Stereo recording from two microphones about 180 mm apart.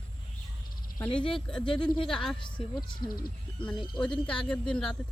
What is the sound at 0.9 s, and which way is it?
Speech, 10° left (ahead or behind).